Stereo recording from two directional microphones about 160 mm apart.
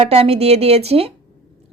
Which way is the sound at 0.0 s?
40° right (ahead or behind).